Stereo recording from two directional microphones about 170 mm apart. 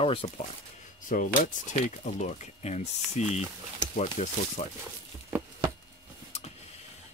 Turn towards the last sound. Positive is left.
turn(degrees=-15)  # may be behind; listen again after turning